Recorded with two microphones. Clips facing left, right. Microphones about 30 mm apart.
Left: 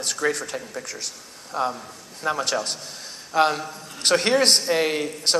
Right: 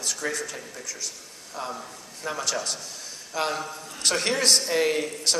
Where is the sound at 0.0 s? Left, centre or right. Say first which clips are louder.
Left 5 dB; left.